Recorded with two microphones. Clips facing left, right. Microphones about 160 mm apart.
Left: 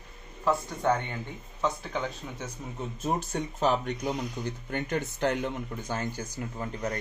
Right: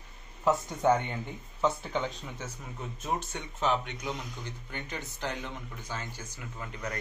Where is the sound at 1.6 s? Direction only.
Centre (ahead or behind).